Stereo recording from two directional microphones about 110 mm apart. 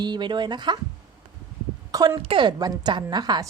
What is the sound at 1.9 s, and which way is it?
Speech, 35° right (ahead or behind).